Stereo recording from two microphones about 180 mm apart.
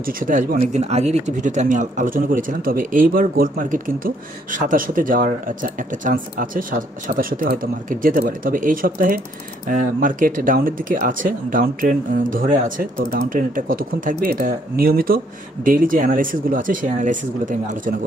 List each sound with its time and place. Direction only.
0.0 s speech: 50° right (ahead or behind)